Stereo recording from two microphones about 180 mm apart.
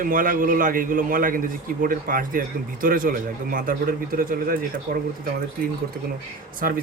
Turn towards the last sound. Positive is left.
turn(degrees=-50)  # may be behind; listen again after turning